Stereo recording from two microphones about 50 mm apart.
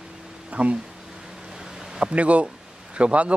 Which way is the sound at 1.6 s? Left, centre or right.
Centre.